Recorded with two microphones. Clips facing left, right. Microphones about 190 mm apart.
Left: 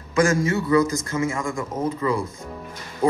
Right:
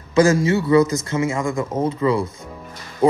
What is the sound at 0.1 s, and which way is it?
A man's voice, 35° right (ahead or behind).